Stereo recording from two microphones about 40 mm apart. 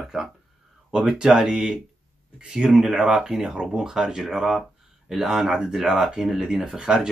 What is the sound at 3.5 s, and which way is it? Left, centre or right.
Speech, right.